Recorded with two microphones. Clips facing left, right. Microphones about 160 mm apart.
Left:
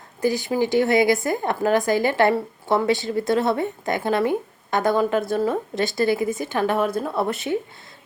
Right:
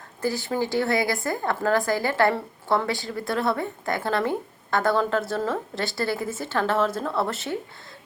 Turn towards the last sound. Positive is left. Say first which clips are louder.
# left 5 dB
turn(degrees=20)  # may be behind; listen again after turning